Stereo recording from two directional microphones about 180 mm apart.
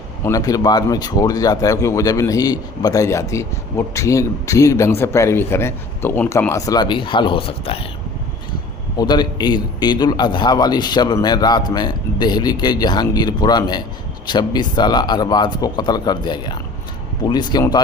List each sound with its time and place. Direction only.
0.3 s speech: 20° left (ahead or behind)
9.0 s speech: 25° left (ahead or behind)